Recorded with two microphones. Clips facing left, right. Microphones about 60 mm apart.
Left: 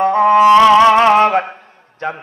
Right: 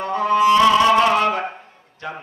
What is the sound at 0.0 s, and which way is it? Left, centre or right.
Music, left.